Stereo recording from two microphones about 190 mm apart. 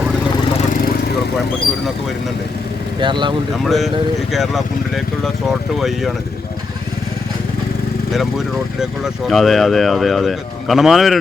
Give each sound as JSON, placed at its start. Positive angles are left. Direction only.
{"t": 3.0, "sound": "speech", "side_deg": -25}
{"t": 3.5, "sound": "speech", "side_deg": 0}
{"t": 8.8, "sound": "speech", "side_deg": 0}